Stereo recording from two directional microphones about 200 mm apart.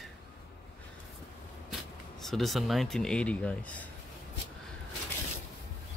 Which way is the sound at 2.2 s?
Centre (ahead or behind).